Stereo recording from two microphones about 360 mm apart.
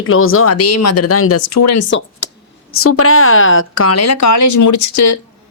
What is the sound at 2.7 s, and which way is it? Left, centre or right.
Speech, left.